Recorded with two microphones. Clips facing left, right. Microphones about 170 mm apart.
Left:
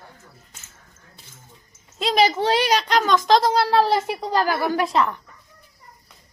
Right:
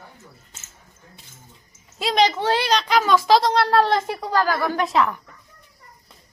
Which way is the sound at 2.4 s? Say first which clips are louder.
Left 1 dB; 15° left (ahead or behind).